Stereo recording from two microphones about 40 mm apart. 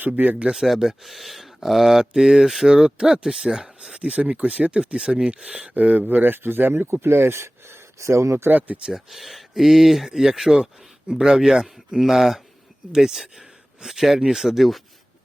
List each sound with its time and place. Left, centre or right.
0.2 s speech: right
0.5 s speech: centre
2.0 s speech: centre
5.7 s speech: right
8.4 s speech: right
8.9 s speech: centre